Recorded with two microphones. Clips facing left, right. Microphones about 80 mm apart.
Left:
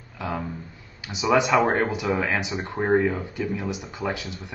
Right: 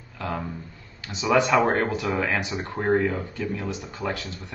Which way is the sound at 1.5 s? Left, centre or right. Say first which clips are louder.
Even; centre.